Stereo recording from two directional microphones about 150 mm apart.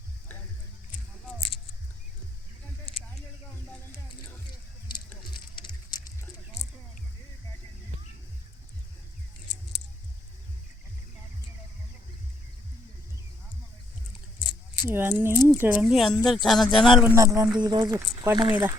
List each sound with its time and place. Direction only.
5.5 s a sound: 30° left (ahead or behind)
14.8 s speech: 15° right (ahead or behind)
15.8 s speech: centre (ahead or behind)
17.2 s speech: 20° right (ahead or behind)